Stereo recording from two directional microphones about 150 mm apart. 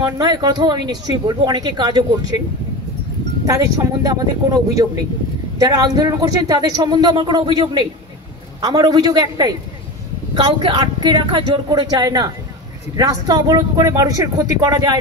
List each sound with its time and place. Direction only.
0.0 s speech: 25° right (ahead or behind)
3.4 s speech: 25° right (ahead or behind)